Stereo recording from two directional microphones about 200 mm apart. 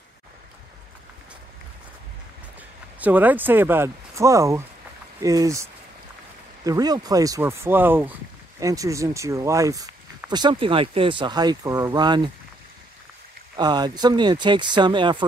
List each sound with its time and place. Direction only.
3.0 s speech: 10° right (ahead or behind)
13.6 s speech: 20° right (ahead or behind)